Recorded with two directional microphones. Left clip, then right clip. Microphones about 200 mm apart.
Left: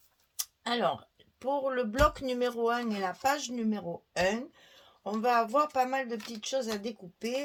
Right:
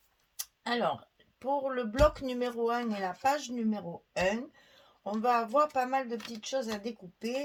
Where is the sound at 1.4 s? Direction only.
35° left (ahead or behind).